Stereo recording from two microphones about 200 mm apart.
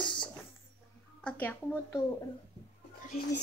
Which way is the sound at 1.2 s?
5° left (ahead or behind).